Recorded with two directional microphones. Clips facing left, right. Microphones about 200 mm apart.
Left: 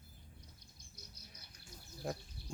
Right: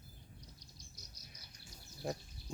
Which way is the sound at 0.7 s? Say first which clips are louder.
Even; 55° left (ahead or behind).